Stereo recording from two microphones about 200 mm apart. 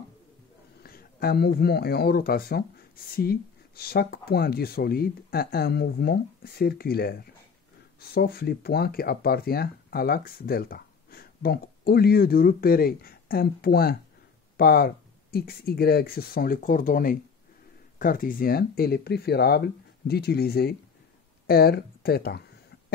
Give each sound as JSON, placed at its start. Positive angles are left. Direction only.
{"t": 0.8, "sound": "speech", "side_deg": 50}